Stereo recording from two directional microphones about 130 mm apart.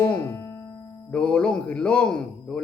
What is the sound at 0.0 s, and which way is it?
Music, 20° left (ahead or behind).